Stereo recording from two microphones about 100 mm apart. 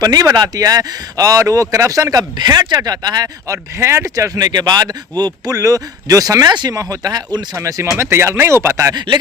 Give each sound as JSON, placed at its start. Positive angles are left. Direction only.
{"t": 0.0, "sound": "speech", "side_deg": -40}
{"t": 3.8, "sound": "speech", "side_deg": -30}
{"t": 7.5, "sound": "speech", "side_deg": -30}